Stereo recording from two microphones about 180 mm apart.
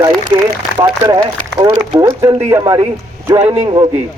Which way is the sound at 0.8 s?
25° right (ahead or behind).